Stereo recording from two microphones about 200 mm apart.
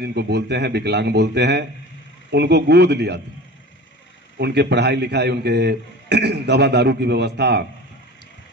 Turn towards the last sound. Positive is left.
turn(degrees=-55)  # may be behind; listen again after turning